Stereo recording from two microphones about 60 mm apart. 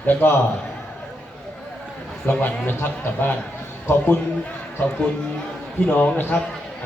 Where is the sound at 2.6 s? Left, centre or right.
Left.